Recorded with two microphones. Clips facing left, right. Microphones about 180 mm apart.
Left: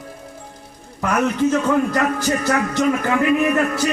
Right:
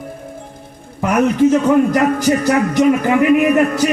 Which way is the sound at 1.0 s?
20° right (ahead or behind).